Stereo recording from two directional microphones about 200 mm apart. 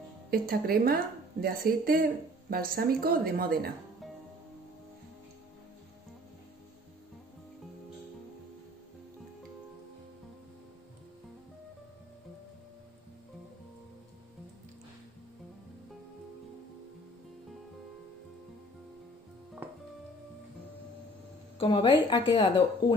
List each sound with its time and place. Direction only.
0.3 s a woman's voice: 50° right (ahead or behind)
21.5 s a woman's voice: 25° left (ahead or behind)